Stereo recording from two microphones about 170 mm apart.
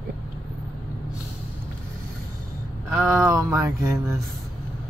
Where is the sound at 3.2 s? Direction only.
20° right (ahead or behind).